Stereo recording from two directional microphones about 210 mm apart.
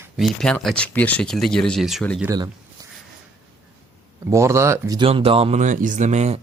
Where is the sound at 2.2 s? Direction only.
15° right (ahead or behind).